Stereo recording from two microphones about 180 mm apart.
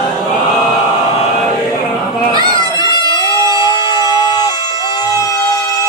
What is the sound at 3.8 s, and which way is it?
Music, 25° left (ahead or behind).